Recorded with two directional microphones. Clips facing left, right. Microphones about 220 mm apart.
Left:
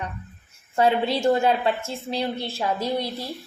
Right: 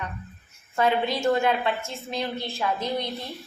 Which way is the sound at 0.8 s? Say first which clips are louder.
Left 3 dB; 30° left (ahead or behind).